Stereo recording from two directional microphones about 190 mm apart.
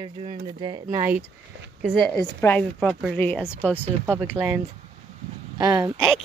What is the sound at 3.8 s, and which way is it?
Speech, 10° right (ahead or behind).